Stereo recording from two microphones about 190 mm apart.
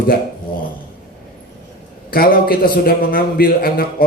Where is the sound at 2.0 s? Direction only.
50° left (ahead or behind).